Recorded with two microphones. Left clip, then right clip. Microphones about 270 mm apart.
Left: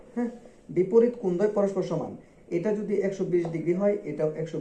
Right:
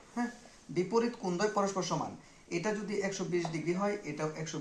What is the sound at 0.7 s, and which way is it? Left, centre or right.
Speech, centre.